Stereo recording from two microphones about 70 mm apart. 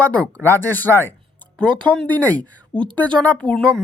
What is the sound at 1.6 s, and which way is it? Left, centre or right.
Speech, centre.